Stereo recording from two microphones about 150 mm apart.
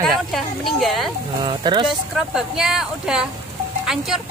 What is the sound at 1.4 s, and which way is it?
Speech, 30° right (ahead or behind).